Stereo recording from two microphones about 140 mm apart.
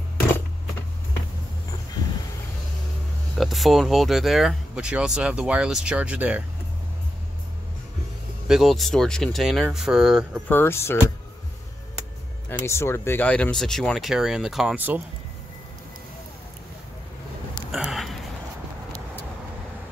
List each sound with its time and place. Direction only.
3.3 s speech: centre (ahead or behind)
8.5 s speech: centre (ahead or behind)
10.5 s speech: 15° left (ahead or behind)
12.4 s speech: 15° left (ahead or behind); by 15.0 s 10° right (ahead or behind)
17.6 s a sound: centre (ahead or behind)